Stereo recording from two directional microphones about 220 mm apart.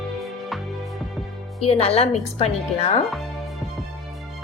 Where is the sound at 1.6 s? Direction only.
25° left (ahead or behind).